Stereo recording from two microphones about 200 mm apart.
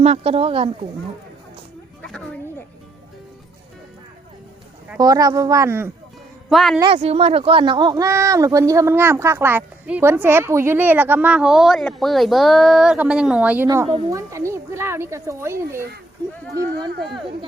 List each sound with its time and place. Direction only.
0.0 s speech: 30° right (ahead or behind)
4.9 s speech: 20° right (ahead or behind)
6.5 s a woman's voice: centre (ahead or behind)
6.9 s speech: 30° right (ahead or behind); by 13.7 s 5° right (ahead or behind)
13.7 s speech: 20° right (ahead or behind)